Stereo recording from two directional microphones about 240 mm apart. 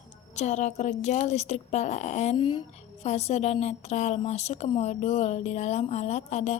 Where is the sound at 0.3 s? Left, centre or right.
Left.